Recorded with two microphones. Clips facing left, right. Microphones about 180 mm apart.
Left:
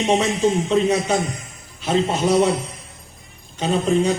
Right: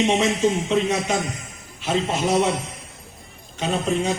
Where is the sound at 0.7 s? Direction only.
35° left (ahead or behind).